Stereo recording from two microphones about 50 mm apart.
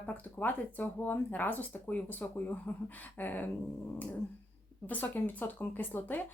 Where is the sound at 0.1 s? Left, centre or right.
Left.